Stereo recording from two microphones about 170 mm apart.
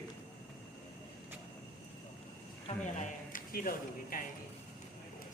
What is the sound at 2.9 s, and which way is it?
Speech, 55° left (ahead or behind).